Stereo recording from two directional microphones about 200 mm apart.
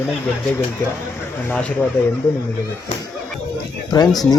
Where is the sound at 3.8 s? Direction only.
20° left (ahead or behind).